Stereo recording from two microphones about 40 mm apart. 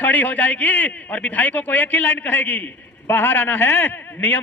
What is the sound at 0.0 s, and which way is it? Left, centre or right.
A man's voice, left.